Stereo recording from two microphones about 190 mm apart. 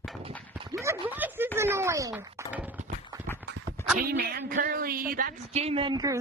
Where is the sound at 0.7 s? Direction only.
15° right (ahead or behind).